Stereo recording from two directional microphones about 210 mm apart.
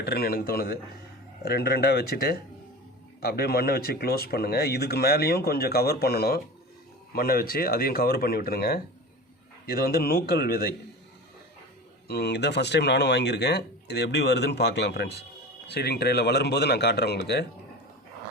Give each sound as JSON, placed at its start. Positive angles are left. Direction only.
{"t": 0.0, "sound": "speech", "side_deg": 50}
{"t": 12.0, "sound": "speech", "side_deg": 50}